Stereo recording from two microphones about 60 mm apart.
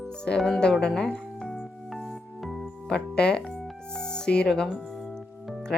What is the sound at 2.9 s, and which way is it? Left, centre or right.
Music, centre.